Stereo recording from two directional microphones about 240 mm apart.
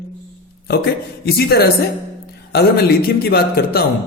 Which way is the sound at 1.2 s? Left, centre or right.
Left.